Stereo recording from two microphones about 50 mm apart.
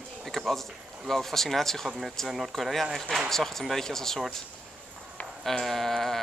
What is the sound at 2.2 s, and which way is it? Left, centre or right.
Speech, centre.